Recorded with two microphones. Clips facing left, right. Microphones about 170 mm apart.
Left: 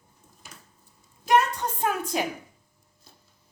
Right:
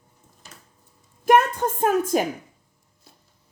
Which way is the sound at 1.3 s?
50° right (ahead or behind).